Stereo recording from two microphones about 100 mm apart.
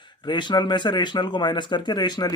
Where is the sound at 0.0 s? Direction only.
50° left (ahead or behind).